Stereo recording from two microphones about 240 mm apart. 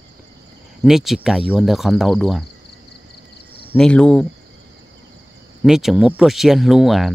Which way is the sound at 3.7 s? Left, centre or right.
Centre.